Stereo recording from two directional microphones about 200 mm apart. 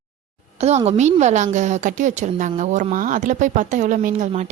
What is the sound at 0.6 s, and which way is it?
A woman's voice, 35° right (ahead or behind).